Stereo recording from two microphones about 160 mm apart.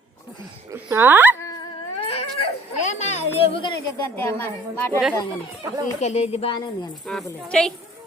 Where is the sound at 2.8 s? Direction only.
45° left (ahead or behind).